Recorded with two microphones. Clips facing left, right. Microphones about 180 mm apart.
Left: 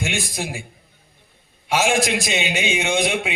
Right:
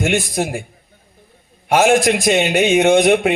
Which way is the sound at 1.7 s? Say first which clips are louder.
Right 6 dB; 50° right (ahead or behind).